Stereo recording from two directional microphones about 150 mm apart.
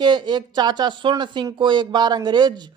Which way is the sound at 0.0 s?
30° right (ahead or behind).